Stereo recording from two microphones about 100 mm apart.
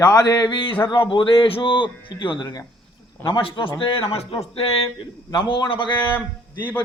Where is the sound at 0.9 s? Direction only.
50° left (ahead or behind).